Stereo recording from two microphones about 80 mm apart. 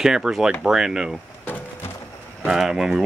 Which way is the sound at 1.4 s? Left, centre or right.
Left.